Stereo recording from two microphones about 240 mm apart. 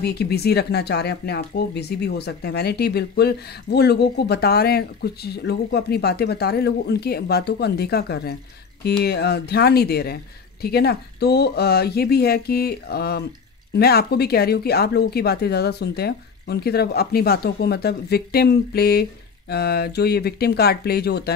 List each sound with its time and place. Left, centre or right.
0.0 s speech: left